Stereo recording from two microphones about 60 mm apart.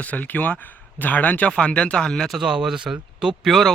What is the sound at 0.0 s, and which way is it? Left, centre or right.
Speech, left.